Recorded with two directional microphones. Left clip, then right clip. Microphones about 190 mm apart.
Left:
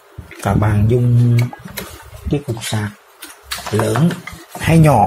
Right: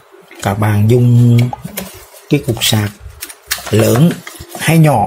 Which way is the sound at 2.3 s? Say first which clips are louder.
Right 8 dB; 40° right (ahead or behind).